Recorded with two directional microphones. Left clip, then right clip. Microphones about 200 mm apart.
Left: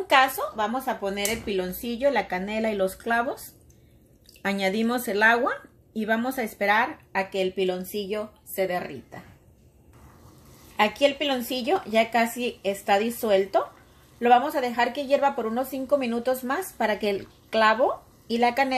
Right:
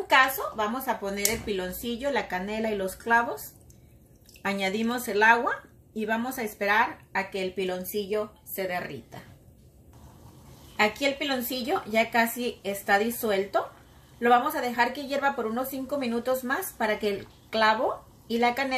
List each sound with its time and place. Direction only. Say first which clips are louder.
0.0 s speech: left 1 dB; 35° left (ahead or behind)
4.4 s speech: left 3 dB; 40° left (ahead or behind)
11.0 s speech: left 4 dB; 35° left (ahead or behind)